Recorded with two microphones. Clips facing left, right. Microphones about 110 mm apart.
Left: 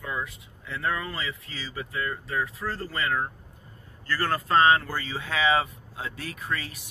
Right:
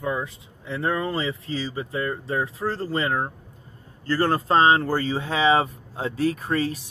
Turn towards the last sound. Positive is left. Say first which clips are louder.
# right 8 dB
turn(degrees=-35)  # may be behind; listen again after turning